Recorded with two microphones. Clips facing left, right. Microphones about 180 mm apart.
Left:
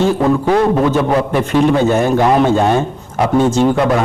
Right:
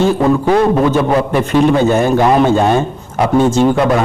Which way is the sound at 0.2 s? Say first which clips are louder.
Right 1 dB; 25° right (ahead or behind).